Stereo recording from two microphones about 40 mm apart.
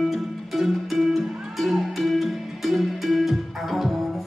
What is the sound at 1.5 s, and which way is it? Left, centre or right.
Music, centre.